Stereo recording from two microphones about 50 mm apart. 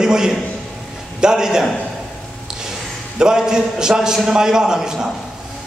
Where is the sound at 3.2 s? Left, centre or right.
Centre.